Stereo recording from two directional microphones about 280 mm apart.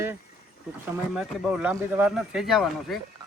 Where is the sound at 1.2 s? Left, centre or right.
Centre.